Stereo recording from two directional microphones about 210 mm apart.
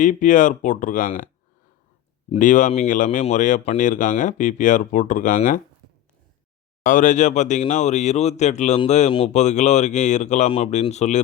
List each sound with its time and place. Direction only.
0.0 s speech: 35° left (ahead or behind)
2.3 s speech: 35° left (ahead or behind)
6.8 s speech: 40° left (ahead or behind)